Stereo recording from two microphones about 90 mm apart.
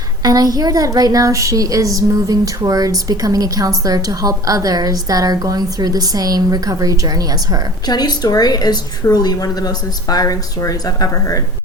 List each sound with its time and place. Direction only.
0.2 s a woman's voice: 45° right (ahead or behind)
7.9 s a woman's voice: 50° left (ahead or behind)